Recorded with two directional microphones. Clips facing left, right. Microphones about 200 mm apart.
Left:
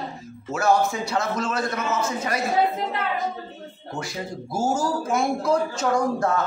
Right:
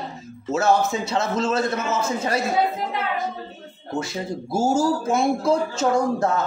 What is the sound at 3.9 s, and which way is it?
A man's voice, 25° right (ahead or behind).